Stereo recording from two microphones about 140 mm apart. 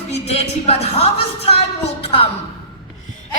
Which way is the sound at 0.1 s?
50° left (ahead or behind).